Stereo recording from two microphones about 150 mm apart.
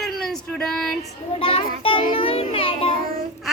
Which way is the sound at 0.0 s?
Centre (ahead or behind).